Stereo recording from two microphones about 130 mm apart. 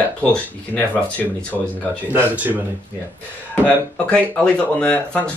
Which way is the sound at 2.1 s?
15° right (ahead or behind).